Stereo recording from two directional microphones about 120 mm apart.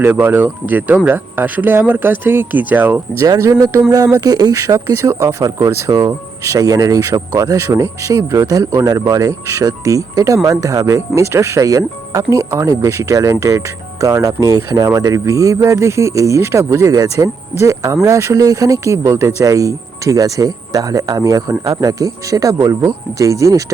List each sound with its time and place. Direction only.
0.0 s speech: 15° right (ahead or behind)